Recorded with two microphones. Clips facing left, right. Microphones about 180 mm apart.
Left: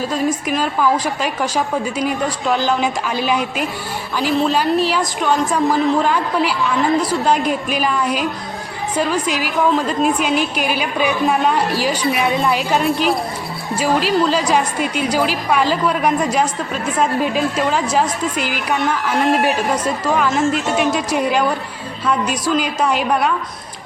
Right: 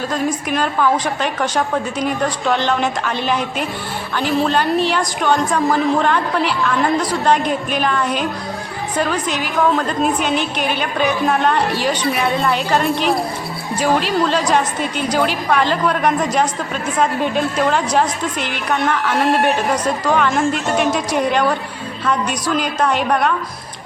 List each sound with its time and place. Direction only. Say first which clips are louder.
0.1 s a woman's voice: left 1 dB; 5° left (ahead or behind)